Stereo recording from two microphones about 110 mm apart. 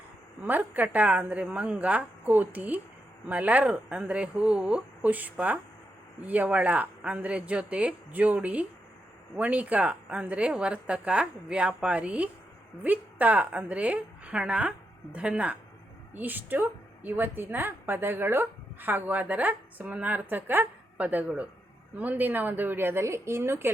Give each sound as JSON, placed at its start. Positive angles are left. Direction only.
{"t": 0.4, "sound": "a woman's voice", "side_deg": -15}